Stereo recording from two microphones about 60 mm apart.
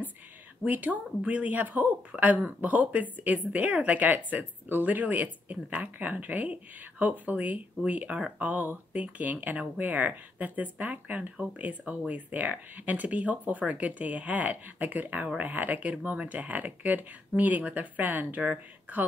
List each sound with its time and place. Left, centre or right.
0.7 s speech: right